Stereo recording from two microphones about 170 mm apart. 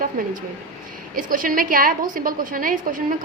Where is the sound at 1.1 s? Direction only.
50° right (ahead or behind).